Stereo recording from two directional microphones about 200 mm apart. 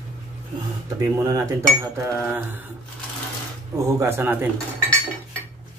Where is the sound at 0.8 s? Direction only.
15° right (ahead or behind).